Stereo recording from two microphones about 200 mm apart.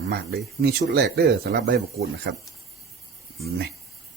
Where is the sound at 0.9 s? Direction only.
55° right (ahead or behind).